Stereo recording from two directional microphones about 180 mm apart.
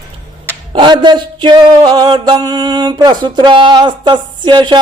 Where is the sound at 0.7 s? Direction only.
25° right (ahead or behind).